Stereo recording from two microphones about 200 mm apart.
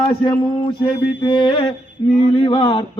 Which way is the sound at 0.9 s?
60° left (ahead or behind).